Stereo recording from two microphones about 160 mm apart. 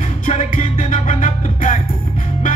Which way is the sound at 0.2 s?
50° left (ahead or behind).